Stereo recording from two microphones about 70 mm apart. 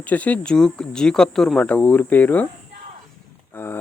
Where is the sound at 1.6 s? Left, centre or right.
Centre.